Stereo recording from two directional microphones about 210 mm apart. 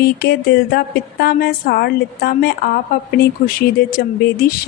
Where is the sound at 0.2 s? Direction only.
50° left (ahead or behind).